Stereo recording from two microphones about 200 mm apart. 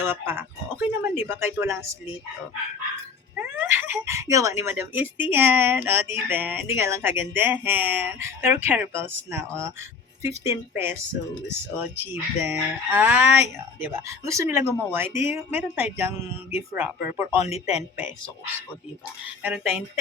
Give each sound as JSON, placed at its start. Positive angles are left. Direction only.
{"t": 0.0, "sound": "speech", "side_deg": -10}
{"t": 3.3, "sound": "speech", "side_deg": -10}
{"t": 17.4, "sound": "a man's voice", "side_deg": 30}
{"t": 19.4, "sound": "speech", "side_deg": -10}